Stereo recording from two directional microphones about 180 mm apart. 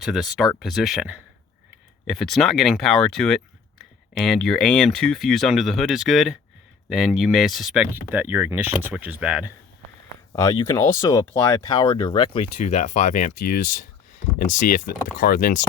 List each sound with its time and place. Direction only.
0.0 s speech: centre (ahead or behind)
10.3 s speech: 20° left (ahead or behind); by 15.6 s 50° left (ahead or behind)